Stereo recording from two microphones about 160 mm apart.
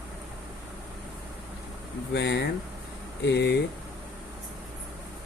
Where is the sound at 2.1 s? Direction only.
90° left.